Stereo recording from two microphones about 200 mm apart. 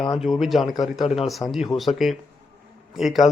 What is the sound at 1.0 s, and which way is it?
Speech, 30° left (ahead or behind).